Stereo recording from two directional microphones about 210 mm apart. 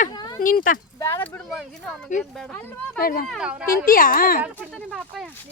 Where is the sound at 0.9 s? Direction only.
10° left (ahead or behind).